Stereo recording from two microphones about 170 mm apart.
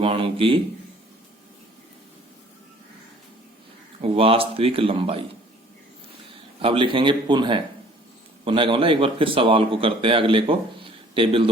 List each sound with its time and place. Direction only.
0.0 s speech: 35° right (ahead or behind)
4.0 s speech: 35° right (ahead or behind)
6.6 s speech: 30° right (ahead or behind)